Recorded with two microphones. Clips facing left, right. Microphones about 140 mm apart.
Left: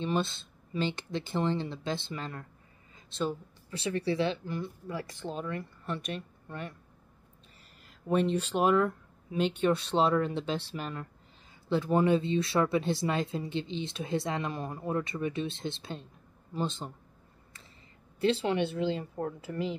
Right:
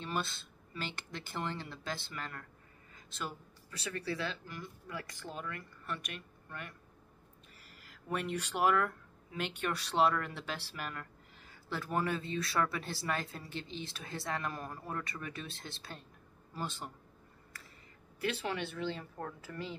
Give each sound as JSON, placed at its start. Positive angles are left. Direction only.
{"t": 0.0, "sound": "speech", "side_deg": 20}
{"t": 7.8, "sound": "speech", "side_deg": 25}
{"t": 18.2, "sound": "speech", "side_deg": 30}